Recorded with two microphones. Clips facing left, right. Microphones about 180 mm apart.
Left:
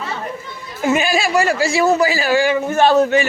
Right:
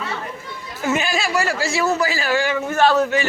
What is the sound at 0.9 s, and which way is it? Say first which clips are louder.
A man's voice: left 4 dB; 10° left (ahead or behind).